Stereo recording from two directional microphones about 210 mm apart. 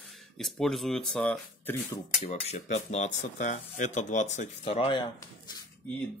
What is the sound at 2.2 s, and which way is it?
Speech, 30° left (ahead or behind).